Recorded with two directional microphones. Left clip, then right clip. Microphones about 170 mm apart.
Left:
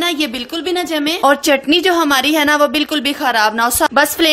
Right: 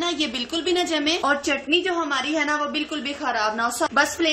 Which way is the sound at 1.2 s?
60° left (ahead or behind).